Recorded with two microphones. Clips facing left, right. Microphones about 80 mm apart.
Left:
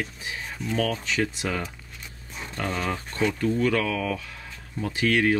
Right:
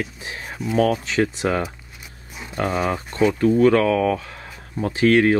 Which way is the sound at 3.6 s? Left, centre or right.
Right.